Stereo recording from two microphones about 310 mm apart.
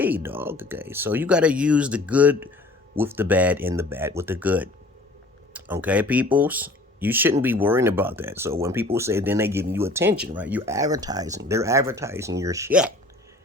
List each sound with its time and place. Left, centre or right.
0.0 s speech: centre